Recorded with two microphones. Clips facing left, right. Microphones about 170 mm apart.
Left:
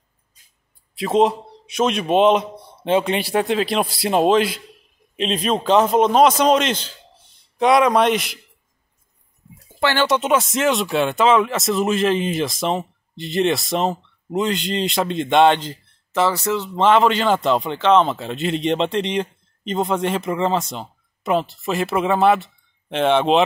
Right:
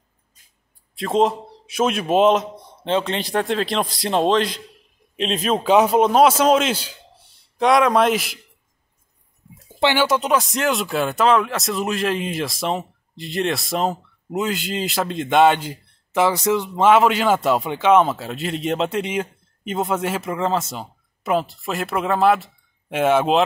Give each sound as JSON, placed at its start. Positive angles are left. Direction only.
{"t": 0.9, "sound": "speech", "side_deg": 0}
{"t": 9.8, "sound": "speech", "side_deg": -15}
{"t": 10.0, "sound": "speech", "side_deg": 0}